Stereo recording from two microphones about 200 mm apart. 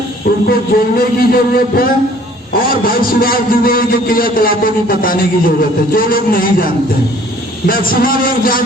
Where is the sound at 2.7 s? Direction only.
45° left (ahead or behind).